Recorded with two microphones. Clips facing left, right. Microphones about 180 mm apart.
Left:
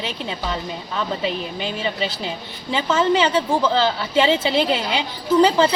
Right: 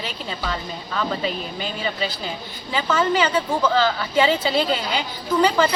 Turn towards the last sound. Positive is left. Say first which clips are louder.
# left 3 dB
turn(degrees=30)  # may be behind; listen again after turning